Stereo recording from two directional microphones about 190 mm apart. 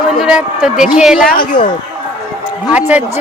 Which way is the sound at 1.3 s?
50° left (ahead or behind).